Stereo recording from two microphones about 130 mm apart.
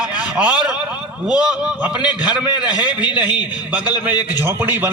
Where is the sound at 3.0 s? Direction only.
35° left (ahead or behind).